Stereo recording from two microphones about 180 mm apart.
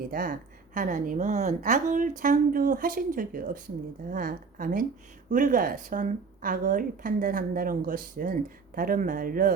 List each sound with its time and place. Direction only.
0.1 s a woman's voice: 50° right (ahead or behind)